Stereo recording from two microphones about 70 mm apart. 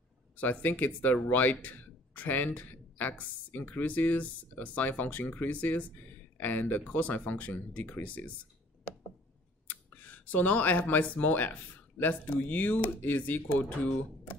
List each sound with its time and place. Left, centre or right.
0.4 s speech: left
9.7 s speech: left